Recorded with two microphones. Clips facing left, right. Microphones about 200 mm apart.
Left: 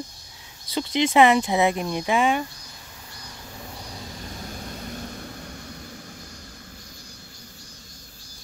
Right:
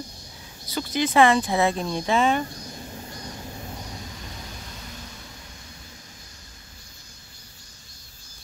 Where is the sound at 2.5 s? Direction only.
35° right (ahead or behind).